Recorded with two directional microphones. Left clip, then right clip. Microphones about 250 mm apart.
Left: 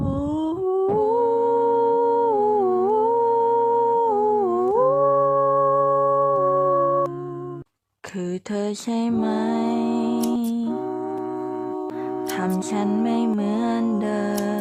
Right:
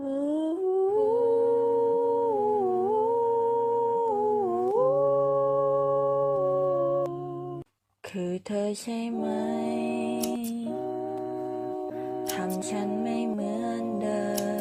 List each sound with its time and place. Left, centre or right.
0.9 s humming: centre
8.5 s music: centre
12.9 s music: centre